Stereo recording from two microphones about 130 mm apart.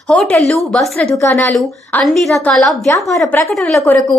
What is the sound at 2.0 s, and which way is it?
A woman's voice, centre (ahead or behind).